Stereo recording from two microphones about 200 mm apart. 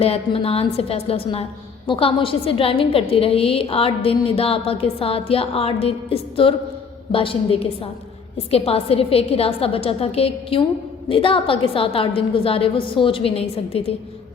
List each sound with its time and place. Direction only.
0.0 s a woman's voice: 30° left (ahead or behind)